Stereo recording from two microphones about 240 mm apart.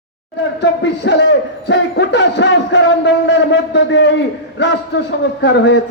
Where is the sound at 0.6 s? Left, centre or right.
Left.